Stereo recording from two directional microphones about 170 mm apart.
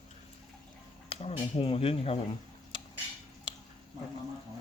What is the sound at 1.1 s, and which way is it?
Speech, 35° left (ahead or behind).